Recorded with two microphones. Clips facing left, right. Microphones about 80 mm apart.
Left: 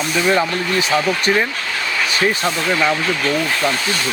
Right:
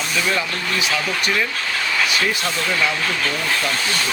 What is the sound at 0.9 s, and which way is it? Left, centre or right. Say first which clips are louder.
Speech: left 6 dB; left.